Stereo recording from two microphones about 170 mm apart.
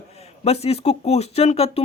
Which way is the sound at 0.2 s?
35° left (ahead or behind).